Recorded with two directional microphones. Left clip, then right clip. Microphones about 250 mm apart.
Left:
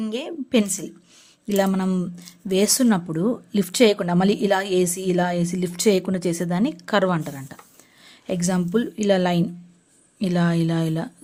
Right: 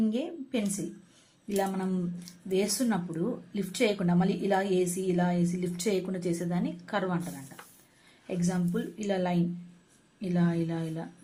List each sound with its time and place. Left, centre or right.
0.0 s a woman's voice: left